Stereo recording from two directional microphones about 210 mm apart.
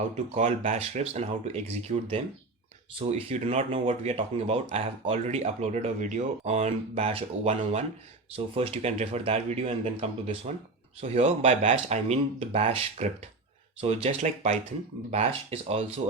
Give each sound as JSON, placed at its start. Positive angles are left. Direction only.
{"t": 0.0, "sound": "speech", "side_deg": -35}